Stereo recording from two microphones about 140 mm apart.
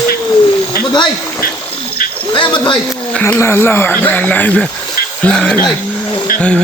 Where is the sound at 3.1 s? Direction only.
15° left (ahead or behind).